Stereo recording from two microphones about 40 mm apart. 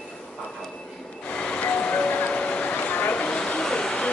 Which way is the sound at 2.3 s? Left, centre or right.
Left.